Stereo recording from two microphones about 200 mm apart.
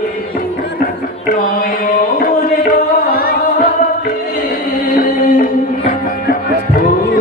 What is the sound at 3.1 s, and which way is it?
Music, 50° left (ahead or behind).